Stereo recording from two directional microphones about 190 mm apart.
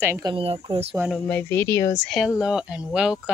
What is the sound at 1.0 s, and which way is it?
Speech, 5° left (ahead or behind).